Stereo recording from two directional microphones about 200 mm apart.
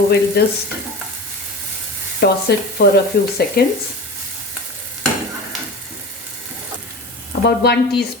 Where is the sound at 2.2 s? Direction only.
55° left (ahead or behind).